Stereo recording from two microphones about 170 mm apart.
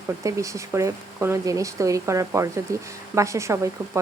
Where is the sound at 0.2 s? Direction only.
20° right (ahead or behind).